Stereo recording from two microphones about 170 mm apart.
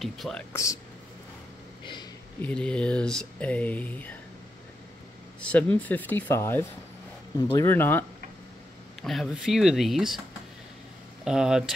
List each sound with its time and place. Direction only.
0.0 s speech: centre (ahead or behind)
0.5 s speech: 20° left (ahead or behind)
2.4 s speech: 5° left (ahead or behind)
5.4 s speech: 10° left (ahead or behind)
9.0 s speech: centre (ahead or behind)
11.2 s speech: 5° right (ahead or behind)